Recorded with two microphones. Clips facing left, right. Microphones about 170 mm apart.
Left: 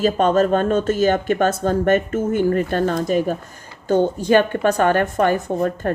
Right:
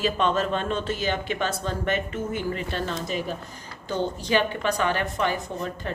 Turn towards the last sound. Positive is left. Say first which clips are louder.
# left 10 dB
turn(degrees=50)  # may be behind; listen again after turning